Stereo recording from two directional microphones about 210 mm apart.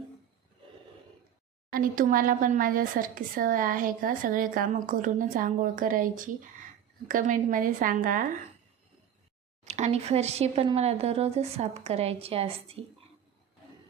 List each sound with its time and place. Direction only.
1.7 s speech: 40° right (ahead or behind)
9.6 s speech: 35° right (ahead or behind)